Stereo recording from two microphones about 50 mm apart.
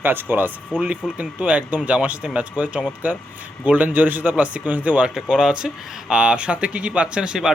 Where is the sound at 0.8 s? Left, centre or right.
Right.